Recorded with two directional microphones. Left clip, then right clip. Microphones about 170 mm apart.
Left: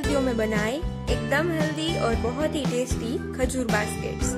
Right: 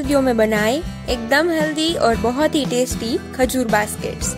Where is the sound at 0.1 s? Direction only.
45° right (ahead or behind).